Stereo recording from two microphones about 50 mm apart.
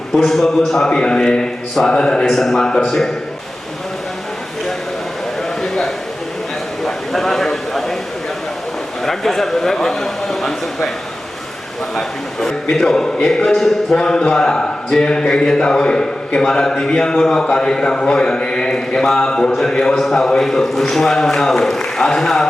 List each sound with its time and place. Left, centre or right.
0.3 s a man's voice: centre
0.9 s a man's voice: centre
1.9 s speech: centre
2.3 s a man's voice: centre
5.4 s a sound: centre
9.0 s a man's voice: centre
11.9 s a man's voice: centre